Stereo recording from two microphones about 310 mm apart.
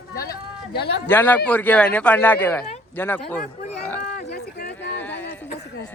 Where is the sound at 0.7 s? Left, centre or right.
Left.